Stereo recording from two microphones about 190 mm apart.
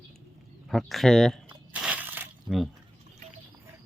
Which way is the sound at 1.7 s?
5° right (ahead or behind).